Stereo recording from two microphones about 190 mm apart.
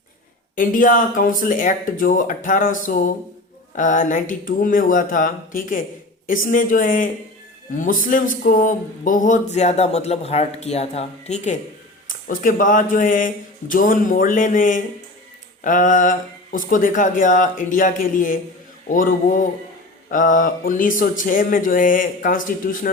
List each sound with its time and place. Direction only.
0.5 s speech: 45° left (ahead or behind)
8.0 s a sound: 45° left (ahead or behind)
12.0 s speech: 45° left (ahead or behind)